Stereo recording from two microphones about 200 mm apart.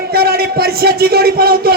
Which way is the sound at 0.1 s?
50° right (ahead or behind).